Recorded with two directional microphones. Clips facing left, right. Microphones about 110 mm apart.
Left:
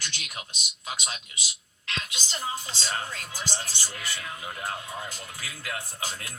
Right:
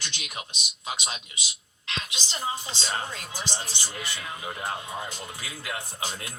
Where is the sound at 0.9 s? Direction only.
15° right (ahead or behind).